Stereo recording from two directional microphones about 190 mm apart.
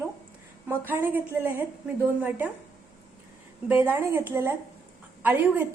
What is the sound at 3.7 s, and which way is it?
A woman's voice, 10° right (ahead or behind).